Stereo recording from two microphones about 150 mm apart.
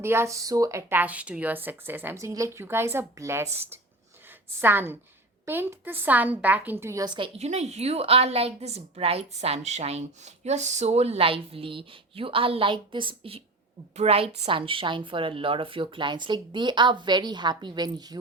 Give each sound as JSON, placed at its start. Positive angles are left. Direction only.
{"t": 0.0, "sound": "speech", "side_deg": -15}
{"t": 7.3, "sound": "a woman's voice", "side_deg": -45}